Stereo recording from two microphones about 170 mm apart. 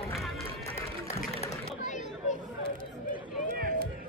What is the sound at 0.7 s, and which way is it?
Run, 15° left (ahead or behind).